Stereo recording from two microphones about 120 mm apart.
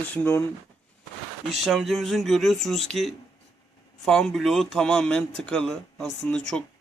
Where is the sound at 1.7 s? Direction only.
Centre (ahead or behind).